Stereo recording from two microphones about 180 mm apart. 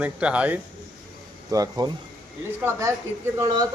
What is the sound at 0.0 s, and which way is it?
Speech, 5° right (ahead or behind).